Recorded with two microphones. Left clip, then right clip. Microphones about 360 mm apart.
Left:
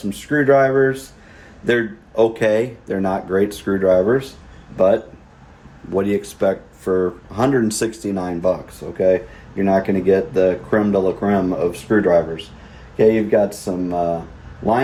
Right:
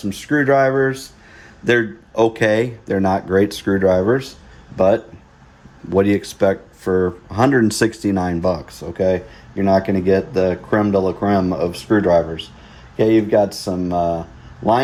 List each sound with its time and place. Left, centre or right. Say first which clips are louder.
0.1 s speech: left 1 dB; right
5.9 s speech: right 3 dB; right